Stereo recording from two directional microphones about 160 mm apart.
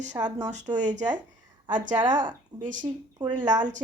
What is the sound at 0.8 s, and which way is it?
Speech, 50° right (ahead or behind).